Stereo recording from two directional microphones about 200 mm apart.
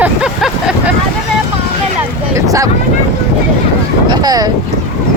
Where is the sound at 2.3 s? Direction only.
15° right (ahead or behind).